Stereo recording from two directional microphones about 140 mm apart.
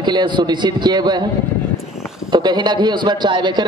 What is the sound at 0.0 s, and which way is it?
A man's voice, 35° right (ahead or behind).